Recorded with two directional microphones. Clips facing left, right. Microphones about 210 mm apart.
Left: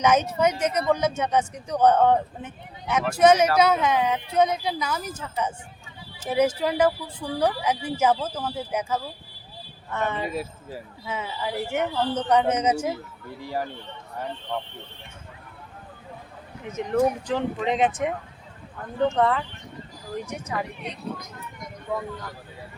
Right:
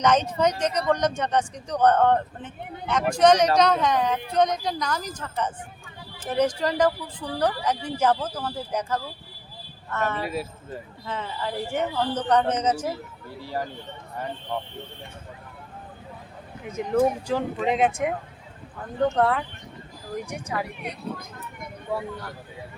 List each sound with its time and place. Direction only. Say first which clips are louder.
0.0 s a woman's voice: even; 10° left (ahead or behind)
10.2 s a woman's voice: even; centre (ahead or behind)
14.5 s speech: even; centre (ahead or behind)
16.9 s speech: right 1 dB; 5° right (ahead or behind)